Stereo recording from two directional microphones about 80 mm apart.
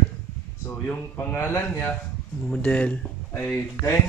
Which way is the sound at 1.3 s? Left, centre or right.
Left.